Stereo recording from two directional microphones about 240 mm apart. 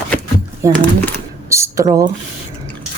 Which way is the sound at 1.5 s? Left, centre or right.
Centre.